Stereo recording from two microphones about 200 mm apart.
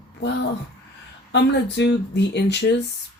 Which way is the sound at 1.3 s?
60° left (ahead or behind).